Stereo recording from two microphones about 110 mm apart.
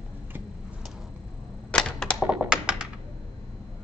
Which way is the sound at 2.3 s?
10° right (ahead or behind).